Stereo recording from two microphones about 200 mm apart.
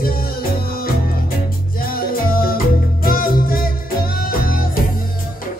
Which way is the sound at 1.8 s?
45° left (ahead or behind).